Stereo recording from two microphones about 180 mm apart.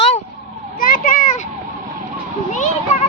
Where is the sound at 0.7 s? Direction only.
50° left (ahead or behind).